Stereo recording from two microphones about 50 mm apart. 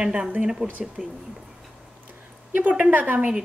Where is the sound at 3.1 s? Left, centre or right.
Centre.